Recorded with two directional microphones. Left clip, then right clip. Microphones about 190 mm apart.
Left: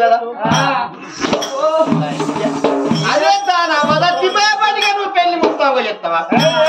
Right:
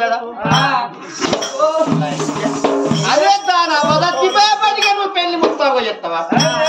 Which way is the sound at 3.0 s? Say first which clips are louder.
Even; 10° left (ahead or behind).